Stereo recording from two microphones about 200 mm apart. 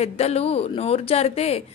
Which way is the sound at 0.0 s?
30° left (ahead or behind).